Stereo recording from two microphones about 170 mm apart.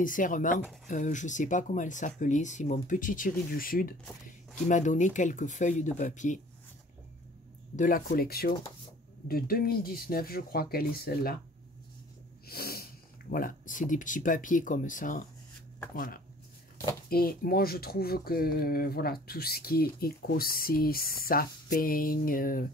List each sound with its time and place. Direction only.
0.0 s speech: 50° left (ahead or behind)
7.7 s speech: 50° left (ahead or behind)
12.4 s snort: 65° left (ahead or behind)
13.3 s speech: 55° left (ahead or behind)
17.1 s speech: 60° left (ahead or behind)